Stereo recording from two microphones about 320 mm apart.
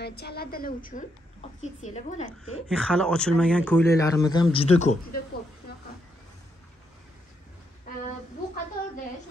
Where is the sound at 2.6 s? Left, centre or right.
Centre; by 5.1 s left.